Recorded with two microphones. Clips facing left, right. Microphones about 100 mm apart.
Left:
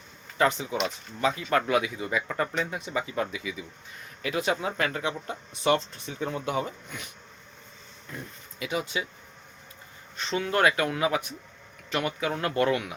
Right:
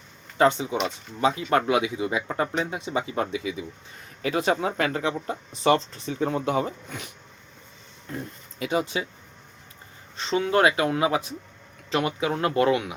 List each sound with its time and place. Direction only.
0.3 s speech: 25° right (ahead or behind)
8.1 s speech: 35° right (ahead or behind)
10.2 s speech: 30° right (ahead or behind)